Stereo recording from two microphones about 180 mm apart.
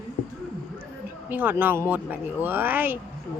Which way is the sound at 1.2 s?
10° right (ahead or behind).